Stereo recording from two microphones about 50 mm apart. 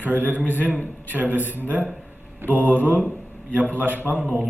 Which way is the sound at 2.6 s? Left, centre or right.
Right.